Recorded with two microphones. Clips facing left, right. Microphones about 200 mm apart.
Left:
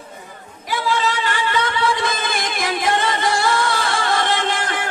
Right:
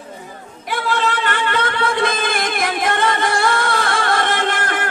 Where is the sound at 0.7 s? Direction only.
55° right (ahead or behind).